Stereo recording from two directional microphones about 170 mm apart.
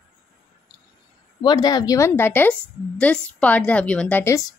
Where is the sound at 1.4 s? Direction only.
25° left (ahead or behind).